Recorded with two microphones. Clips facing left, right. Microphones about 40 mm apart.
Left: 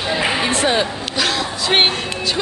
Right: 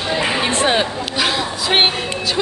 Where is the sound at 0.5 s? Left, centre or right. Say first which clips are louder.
Right 1 dB; right.